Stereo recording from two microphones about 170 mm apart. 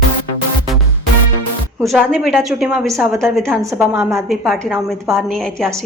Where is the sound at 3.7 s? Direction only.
15° right (ahead or behind).